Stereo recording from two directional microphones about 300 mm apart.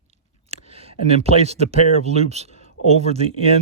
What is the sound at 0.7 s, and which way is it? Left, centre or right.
Speech, centre.